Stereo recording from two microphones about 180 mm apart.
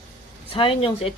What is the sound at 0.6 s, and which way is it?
Speech, 30° left (ahead or behind).